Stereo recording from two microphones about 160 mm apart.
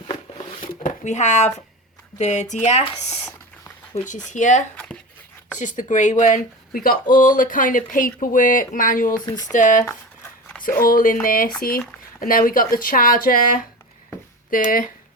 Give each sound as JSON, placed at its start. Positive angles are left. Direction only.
{"t": 0.7, "sound": "a sound", "side_deg": 55}
{"t": 2.1, "sound": "speech", "side_deg": 45}
{"t": 4.3, "sound": "speech", "side_deg": 50}
{"t": 9.2, "sound": "speech", "side_deg": 25}
{"t": 9.5, "sound": "speech", "side_deg": 50}
{"t": 10.6, "sound": "speech", "side_deg": 65}